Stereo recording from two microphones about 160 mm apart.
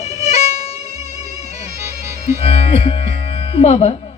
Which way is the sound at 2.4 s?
40° left (ahead or behind).